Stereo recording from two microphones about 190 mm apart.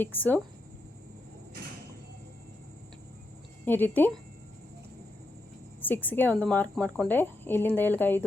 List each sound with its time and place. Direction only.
0.0 s speech: 10° left (ahead or behind)
3.7 s speech: 10° left (ahead or behind)
5.8 s speech: 10° left (ahead or behind)